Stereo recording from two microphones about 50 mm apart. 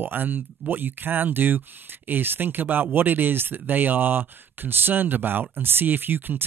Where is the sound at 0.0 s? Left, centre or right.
Right.